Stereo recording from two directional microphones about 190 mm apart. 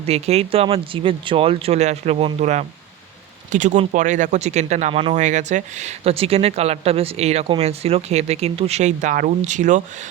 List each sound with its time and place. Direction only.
0.0 s speech: 35° right (ahead or behind)
5.2 s speech: 40° right (ahead or behind)